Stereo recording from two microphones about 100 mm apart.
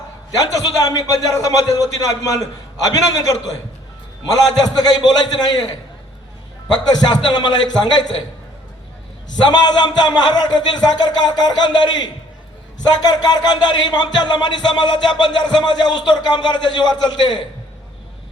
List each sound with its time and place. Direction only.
0.3 s a man's voice: 40° left (ahead or behind)
9.4 s speech: 45° left (ahead or behind)